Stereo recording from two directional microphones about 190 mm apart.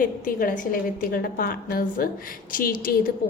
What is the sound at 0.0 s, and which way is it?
A woman's voice, 45° left (ahead or behind).